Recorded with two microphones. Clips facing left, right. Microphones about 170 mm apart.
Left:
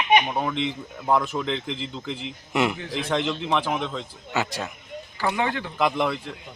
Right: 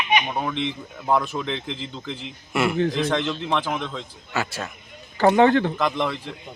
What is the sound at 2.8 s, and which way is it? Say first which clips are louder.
Speech: right 9 dB; 55° right (ahead or behind).